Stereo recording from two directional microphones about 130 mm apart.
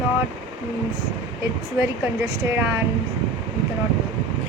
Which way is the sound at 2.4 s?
20° right (ahead or behind).